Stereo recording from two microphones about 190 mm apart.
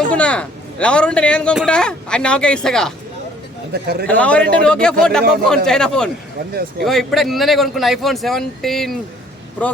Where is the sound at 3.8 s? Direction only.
55° right (ahead or behind).